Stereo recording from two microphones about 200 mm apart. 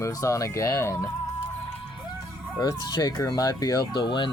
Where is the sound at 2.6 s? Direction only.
20° left (ahead or behind).